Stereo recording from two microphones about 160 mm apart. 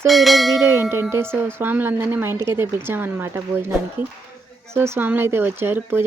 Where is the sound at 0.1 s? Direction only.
Centre (ahead or behind).